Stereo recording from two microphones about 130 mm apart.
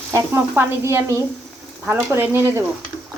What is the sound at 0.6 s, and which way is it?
A woman's voice, 20° right (ahead or behind).